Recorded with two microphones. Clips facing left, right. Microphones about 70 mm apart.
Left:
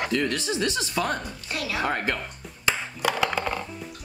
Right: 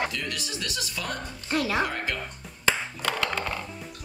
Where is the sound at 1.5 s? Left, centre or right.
Right.